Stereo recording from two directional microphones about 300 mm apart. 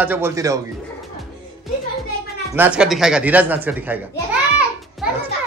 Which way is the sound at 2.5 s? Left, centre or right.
Centre.